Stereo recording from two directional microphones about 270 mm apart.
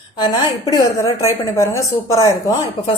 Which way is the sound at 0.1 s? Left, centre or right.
Centre.